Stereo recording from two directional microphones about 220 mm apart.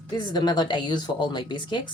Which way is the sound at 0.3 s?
20° left (ahead or behind).